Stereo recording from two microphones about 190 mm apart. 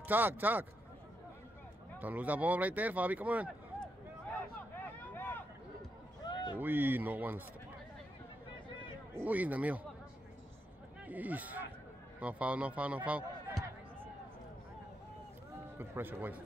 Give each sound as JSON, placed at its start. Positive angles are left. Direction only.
{"t": 0.0, "sound": "speech", "side_deg": -10}
{"t": 2.0, "sound": "speech", "side_deg": -10}
{"t": 5.1, "sound": "a sound", "side_deg": 10}
{"t": 6.2, "sound": "run", "side_deg": 25}
{"t": 6.6, "sound": "speech", "side_deg": -10}
{"t": 9.1, "sound": "speech", "side_deg": -10}
{"t": 11.1, "sound": "speech", "side_deg": -10}
{"t": 15.8, "sound": "speech", "side_deg": -10}